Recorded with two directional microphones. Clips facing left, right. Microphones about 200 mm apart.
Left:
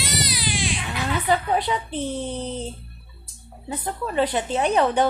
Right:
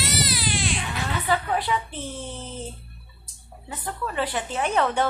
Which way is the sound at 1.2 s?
25° left (ahead or behind).